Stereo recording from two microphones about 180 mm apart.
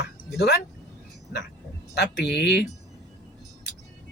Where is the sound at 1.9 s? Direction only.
65° left (ahead or behind).